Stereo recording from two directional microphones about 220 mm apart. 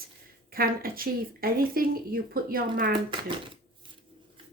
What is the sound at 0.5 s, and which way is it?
Speech, 40° right (ahead or behind).